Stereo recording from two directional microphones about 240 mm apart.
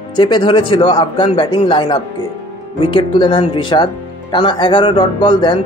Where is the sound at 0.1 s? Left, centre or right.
Centre.